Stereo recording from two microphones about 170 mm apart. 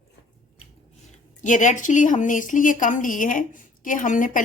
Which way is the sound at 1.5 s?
50° left (ahead or behind).